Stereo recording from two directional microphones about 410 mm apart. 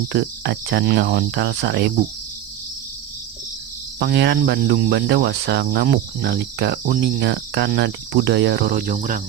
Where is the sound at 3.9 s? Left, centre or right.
Right.